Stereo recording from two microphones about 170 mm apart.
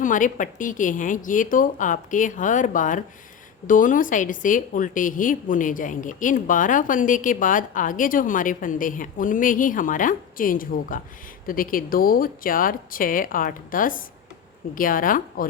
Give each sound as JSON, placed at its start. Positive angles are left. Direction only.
{"t": 0.0, "sound": "a woman's voice", "side_deg": 50}